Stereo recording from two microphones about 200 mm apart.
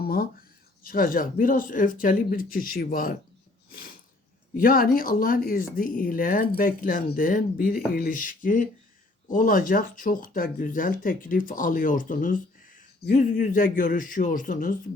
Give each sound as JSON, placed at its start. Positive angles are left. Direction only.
{"t": 0.0, "sound": "speech", "side_deg": 50}
{"t": 3.7, "sound": "a sound", "side_deg": 45}
{"t": 4.5, "sound": "speech", "side_deg": 45}